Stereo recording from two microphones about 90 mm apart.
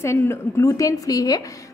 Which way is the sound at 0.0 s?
30° left (ahead or behind).